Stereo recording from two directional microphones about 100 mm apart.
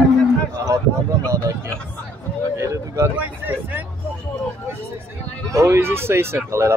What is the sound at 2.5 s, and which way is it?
Speech, 30° right (ahead or behind).